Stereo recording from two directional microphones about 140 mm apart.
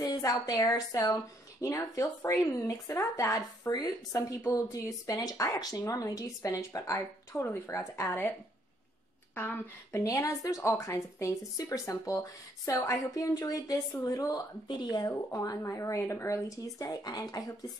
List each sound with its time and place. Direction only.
0.0 s a woman's voice: 25° left (ahead or behind)
9.3 s a woman's voice: 15° left (ahead or behind)